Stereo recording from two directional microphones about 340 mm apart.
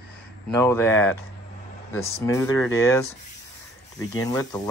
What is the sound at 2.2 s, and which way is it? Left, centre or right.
Speech, centre.